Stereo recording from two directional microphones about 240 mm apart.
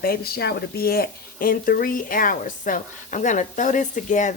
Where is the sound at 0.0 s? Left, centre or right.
Left.